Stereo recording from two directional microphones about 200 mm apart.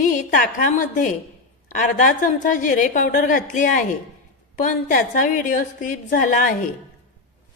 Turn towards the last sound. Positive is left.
turn(degrees=45)  # may be behind; listen again after turning